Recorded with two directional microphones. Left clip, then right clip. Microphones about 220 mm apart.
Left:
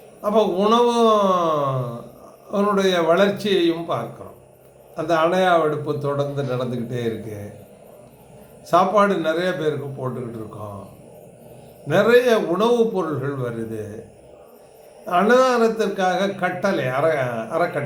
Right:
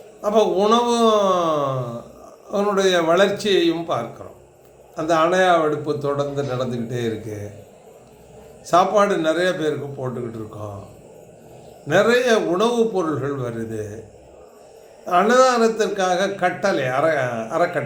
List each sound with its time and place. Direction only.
0.2 s a man's voice: 10° right (ahead or behind)
8.6 s a man's voice: 10° right (ahead or behind)
11.9 s a man's voice: 10° right (ahead or behind)
15.0 s a man's voice: 10° right (ahead or behind)